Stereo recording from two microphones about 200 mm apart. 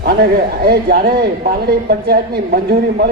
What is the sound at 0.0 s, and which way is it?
Speech, 50° right (ahead or behind).